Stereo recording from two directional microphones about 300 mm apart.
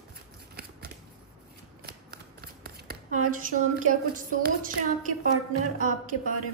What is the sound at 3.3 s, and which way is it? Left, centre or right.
Speech, right.